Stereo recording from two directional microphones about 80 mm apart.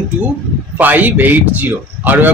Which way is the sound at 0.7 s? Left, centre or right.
Right.